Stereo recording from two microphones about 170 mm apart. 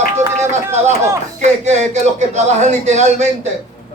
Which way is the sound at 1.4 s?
40° right (ahead or behind).